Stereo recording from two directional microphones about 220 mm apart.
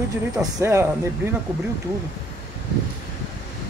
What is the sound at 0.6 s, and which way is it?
Speech, 10° right (ahead or behind).